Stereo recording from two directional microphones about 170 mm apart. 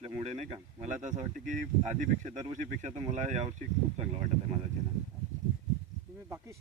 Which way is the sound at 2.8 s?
45° right (ahead or behind).